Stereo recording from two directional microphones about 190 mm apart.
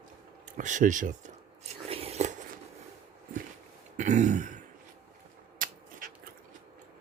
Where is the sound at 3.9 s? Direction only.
40° right (ahead or behind).